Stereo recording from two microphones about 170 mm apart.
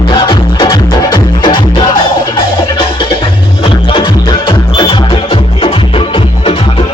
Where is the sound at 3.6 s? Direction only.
30° left (ahead or behind).